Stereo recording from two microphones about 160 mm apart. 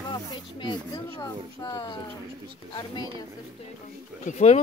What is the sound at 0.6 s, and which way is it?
Speech, 25° left (ahead or behind).